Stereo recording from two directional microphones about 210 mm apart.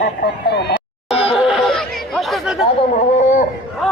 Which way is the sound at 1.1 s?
25° left (ahead or behind).